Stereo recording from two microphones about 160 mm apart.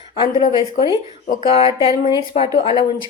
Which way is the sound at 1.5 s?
35° left (ahead or behind).